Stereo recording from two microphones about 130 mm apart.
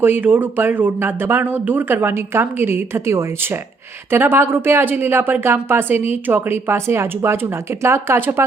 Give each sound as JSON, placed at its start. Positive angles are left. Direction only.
{"t": 0.0, "sound": "speech", "side_deg": -15}